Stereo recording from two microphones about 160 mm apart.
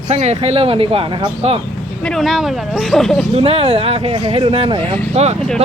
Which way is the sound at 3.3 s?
40° right (ahead or behind).